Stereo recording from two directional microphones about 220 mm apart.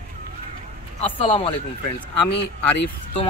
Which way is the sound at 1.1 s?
25° left (ahead or behind).